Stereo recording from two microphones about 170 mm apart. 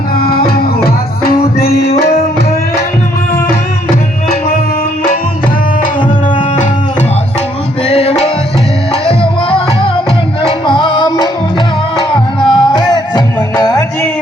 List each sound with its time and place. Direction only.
0.2 s music: 65° left (ahead or behind)
1.5 s music: 65° left (ahead or behind)
7.9 s music: 35° left (ahead or behind); by 14.1 s 20° left (ahead or behind)